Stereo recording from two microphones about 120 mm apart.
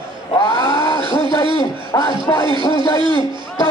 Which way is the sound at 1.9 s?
30° left (ahead or behind).